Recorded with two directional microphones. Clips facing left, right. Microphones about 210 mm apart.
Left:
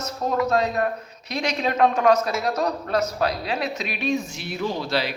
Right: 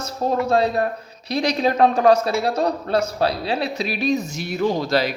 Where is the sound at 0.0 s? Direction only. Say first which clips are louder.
Right 2 dB; 30° right (ahead or behind).